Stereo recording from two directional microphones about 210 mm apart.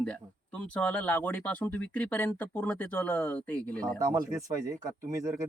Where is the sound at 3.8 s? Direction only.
15° right (ahead or behind).